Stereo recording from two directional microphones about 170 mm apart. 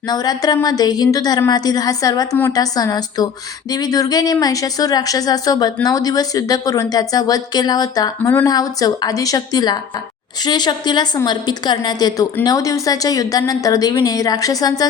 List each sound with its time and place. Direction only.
0.1 s speech: 20° left (ahead or behind)